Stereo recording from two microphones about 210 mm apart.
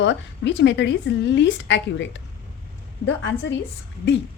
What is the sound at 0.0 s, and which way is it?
A woman's voice, 60° left (ahead or behind).